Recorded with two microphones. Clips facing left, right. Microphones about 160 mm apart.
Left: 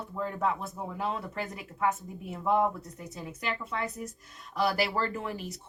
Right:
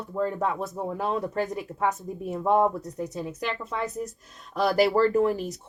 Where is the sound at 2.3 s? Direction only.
40° right (ahead or behind).